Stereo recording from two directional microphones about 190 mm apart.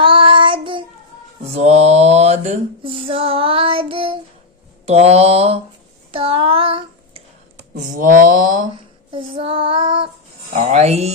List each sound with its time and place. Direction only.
0.0 s child singing: 25° right (ahead or behind)
1.5 s female singing: 35° right (ahead or behind)
4.9 s mantra: 35° right (ahead or behind)
6.1 s child singing: 30° right (ahead or behind)
7.8 s mantra: 45° right (ahead or behind)
8.7 s female singing: 25° right (ahead or behind)
10.5 s mantra: 35° right (ahead or behind)